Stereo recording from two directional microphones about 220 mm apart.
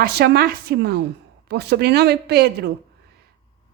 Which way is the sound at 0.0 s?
45° right (ahead or behind).